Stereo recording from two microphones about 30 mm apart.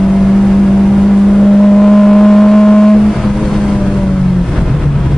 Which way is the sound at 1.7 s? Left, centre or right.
Centre.